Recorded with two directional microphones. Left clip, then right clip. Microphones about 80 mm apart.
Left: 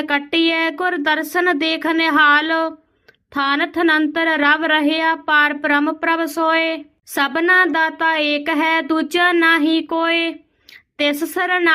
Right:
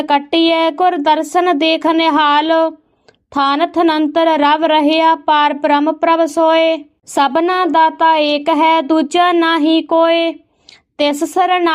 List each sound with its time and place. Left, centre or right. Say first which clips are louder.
0.0 s speech: right 5 dB; right